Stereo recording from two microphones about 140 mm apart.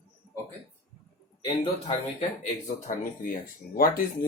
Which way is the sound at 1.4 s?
35° left (ahead or behind).